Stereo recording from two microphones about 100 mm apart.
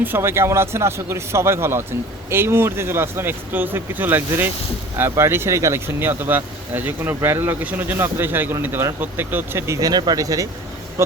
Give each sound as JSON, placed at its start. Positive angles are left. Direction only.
{"t": 0.0, "sound": "speech", "side_deg": -20}